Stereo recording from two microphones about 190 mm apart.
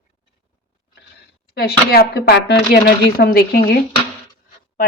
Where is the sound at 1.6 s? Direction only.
55° left (ahead or behind).